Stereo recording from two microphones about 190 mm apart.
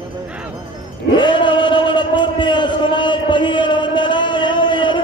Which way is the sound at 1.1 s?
25° left (ahead or behind).